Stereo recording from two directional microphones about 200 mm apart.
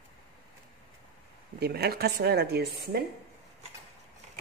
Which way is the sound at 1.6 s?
50° right (ahead or behind).